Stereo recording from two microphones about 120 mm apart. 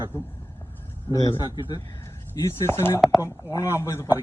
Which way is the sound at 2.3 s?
25° left (ahead or behind).